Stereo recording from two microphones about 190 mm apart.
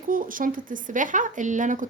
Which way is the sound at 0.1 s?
45° right (ahead or behind).